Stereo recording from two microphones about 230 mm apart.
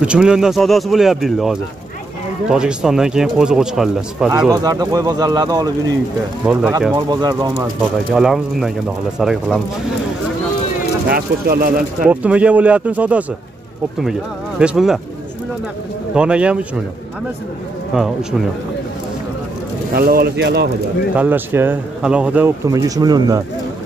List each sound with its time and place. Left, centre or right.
0.0 s speech: centre
4.5 s speech: centre
6.4 s speech: centre
7.1 s speech: centre
7.8 s speech: centre
11.1 s speech: right
12.1 s speech: centre
14.6 s speech: centre
16.2 s speech: centre
17.9 s speech: centre
19.9 s speech: right
21.1 s speech: centre